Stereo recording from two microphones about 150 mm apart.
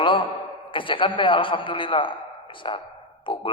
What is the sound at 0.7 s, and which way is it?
A man's voice, 35° left (ahead or behind).